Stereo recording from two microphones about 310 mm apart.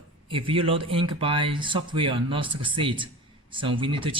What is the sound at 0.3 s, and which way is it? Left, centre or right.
Speech, centre.